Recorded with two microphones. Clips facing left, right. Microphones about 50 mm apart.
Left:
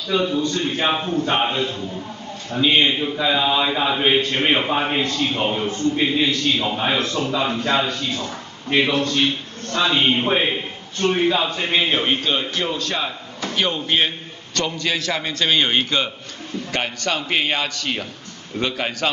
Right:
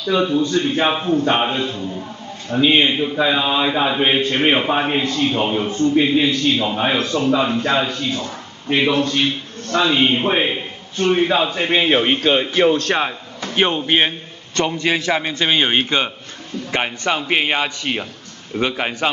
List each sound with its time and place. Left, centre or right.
0.1 s a man's voice: centre
0.5 s a man's voice: right
0.8 s a man's voice: centre
1.1 s a man's voice: right
1.4 s a man's voice: centre
5.0 s a man's voice: right
5.4 s a man's voice: centre
8.8 s a man's voice: right
11.5 s a man's voice: right
13.6 s a man's voice: right